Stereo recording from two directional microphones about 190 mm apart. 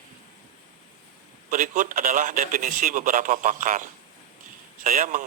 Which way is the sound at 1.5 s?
45° right (ahead or behind).